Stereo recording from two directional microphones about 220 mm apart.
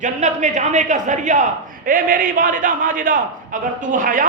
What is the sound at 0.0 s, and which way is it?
A man's voice, 35° right (ahead or behind).